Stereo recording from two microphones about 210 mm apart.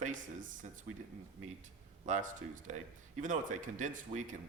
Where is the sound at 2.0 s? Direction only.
35° right (ahead or behind).